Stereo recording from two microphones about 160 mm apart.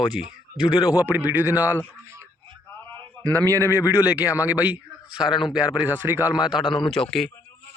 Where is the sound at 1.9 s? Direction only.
15° right (ahead or behind).